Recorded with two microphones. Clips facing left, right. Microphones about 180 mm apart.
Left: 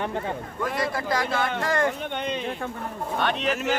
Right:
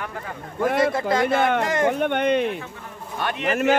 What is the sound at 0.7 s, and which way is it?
Speech, 55° right (ahead or behind).